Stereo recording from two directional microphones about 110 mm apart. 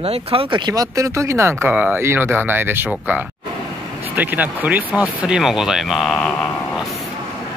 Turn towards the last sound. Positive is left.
turn(degrees=5)  # may be behind; listen again after turning